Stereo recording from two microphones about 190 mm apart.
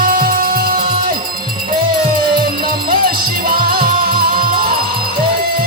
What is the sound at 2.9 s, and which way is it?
Music, 50° right (ahead or behind).